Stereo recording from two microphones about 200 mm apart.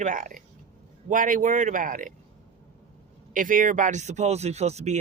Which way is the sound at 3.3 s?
40° right (ahead or behind).